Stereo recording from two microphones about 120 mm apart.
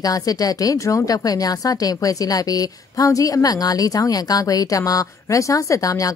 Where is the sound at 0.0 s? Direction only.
30° left (ahead or behind).